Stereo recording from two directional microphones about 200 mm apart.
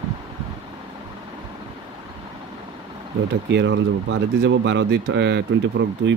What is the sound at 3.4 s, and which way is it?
Speech, 65° right (ahead or behind).